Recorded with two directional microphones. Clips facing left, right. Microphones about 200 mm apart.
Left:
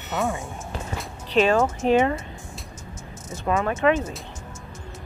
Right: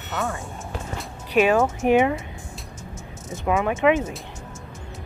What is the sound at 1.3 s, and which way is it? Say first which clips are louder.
Speech: right 1 dB; 10° right (ahead or behind).